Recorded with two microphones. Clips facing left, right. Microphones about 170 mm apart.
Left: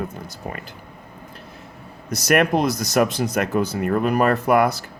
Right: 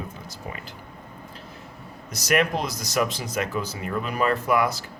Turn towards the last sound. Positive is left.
turn(degrees=60)  # may be behind; listen again after turning